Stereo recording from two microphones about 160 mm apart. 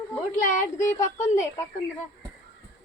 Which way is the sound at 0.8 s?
20° left (ahead or behind).